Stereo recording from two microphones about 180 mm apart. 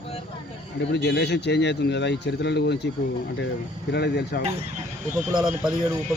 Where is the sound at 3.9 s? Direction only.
65° left (ahead or behind).